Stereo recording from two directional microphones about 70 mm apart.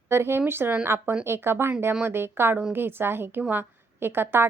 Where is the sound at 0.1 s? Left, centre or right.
Right.